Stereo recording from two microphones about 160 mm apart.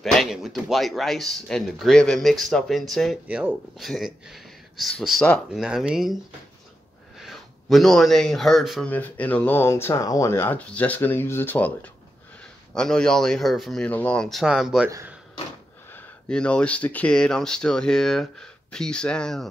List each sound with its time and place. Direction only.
0.0 s speech: centre (ahead or behind)
7.2 s speech: centre (ahead or behind)
14.9 s speech: 15° right (ahead or behind)
15.9 s speech: 5° left (ahead or behind)